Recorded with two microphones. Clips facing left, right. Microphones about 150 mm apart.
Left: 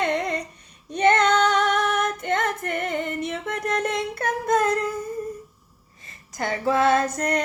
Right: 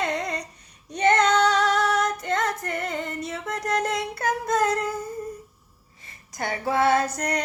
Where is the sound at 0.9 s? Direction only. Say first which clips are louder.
Left 2 dB; 25° left (ahead or behind).